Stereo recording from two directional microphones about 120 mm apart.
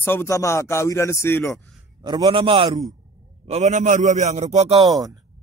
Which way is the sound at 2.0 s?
35° right (ahead or behind).